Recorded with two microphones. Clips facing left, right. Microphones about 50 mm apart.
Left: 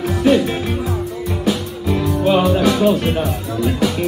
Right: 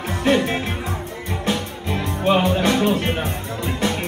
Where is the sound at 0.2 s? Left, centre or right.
Right.